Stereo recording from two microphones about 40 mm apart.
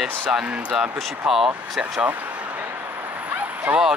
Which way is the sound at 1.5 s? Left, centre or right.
Right.